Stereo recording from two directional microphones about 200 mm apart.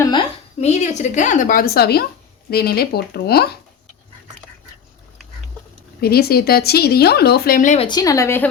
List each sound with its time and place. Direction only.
0.0 s a sound: 20° left (ahead or behind)
0.6 s speech: 35° left (ahead or behind); by 3.5 s 50° left (ahead or behind)
6.0 s speech: 50° left (ahead or behind)
7.9 s a woman's voice: 20° left (ahead or behind)